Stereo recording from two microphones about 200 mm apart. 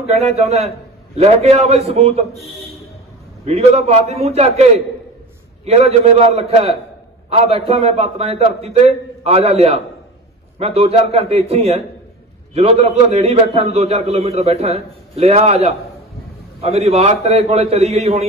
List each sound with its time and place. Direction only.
0.4 s a man's voice: 30° right (ahead or behind)
3.4 s a man's voice: 30° right (ahead or behind)